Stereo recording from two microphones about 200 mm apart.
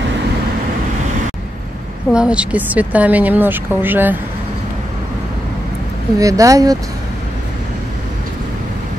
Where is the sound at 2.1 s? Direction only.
5° right (ahead or behind).